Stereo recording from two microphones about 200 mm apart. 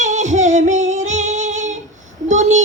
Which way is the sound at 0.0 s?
35° right (ahead or behind).